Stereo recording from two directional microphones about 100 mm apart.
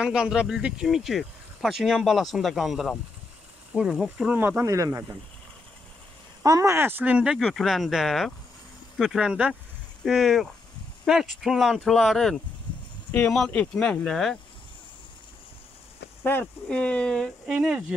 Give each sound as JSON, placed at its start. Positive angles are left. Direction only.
{"t": 0.0, "sound": "speech", "side_deg": -5}
{"t": 4.3, "sound": "speech", "side_deg": -20}
{"t": 4.6, "sound": "speech", "side_deg": -35}
{"t": 6.4, "sound": "speech", "side_deg": -30}
{"t": 7.3, "sound": "speech", "side_deg": 0}
{"t": 12.7, "sound": "a sound", "side_deg": 50}
{"t": 13.3, "sound": "speech", "side_deg": 10}
{"t": 16.6, "sound": "speech", "side_deg": 10}
{"t": 17.5, "sound": "speech", "side_deg": -10}